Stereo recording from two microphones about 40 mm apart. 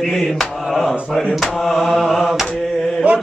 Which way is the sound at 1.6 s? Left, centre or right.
Centre.